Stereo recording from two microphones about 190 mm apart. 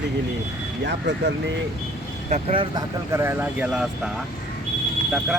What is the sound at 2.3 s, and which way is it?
Speech, 30° right (ahead or behind).